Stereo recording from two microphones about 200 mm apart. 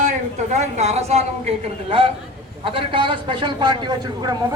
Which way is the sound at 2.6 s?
25° right (ahead or behind).